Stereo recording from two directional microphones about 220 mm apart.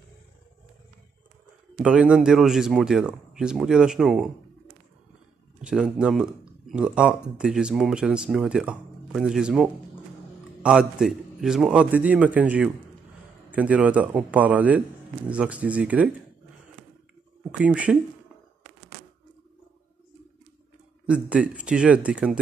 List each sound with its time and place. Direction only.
1.8 s speech: 5° right (ahead or behind)
5.6 s a man's voice: 5° right (ahead or behind)
17.5 s speech: 5° right (ahead or behind)
21.1 s speech: 5° right (ahead or behind)